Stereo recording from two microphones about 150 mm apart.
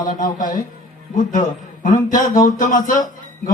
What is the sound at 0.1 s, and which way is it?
A man's voice, 65° left (ahead or behind).